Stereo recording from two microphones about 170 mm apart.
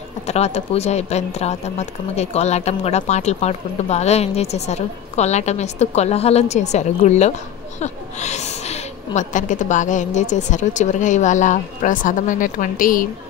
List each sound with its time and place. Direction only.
0.3 s a woman's voice: 40° left (ahead or behind); by 13.1 s 55° left (ahead or behind)